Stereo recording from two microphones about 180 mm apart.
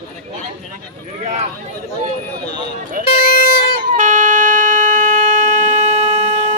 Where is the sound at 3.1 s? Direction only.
55° left (ahead or behind).